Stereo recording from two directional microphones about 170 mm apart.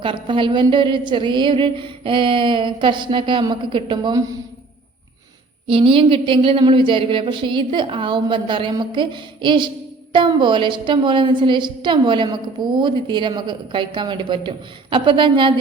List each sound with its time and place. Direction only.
0.0 s a woman's voice: 30° right (ahead or behind)
5.6 s a woman's voice: 30° right (ahead or behind)